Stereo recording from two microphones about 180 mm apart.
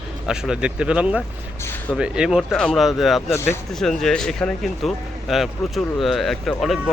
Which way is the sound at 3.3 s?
15° left (ahead or behind).